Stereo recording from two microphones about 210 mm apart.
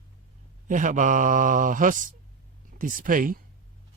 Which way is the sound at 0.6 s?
40° right (ahead or behind).